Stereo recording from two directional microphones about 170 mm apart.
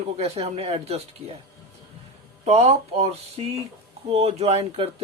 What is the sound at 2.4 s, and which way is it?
Speech, 40° right (ahead or behind).